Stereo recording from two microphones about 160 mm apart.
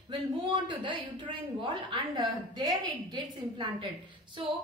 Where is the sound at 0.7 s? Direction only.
30° right (ahead or behind).